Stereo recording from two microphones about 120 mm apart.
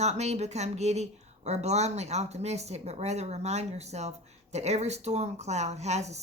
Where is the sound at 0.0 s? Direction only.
70° right (ahead or behind).